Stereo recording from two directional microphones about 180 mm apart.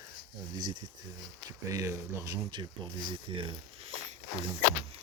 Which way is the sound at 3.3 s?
30° right (ahead or behind).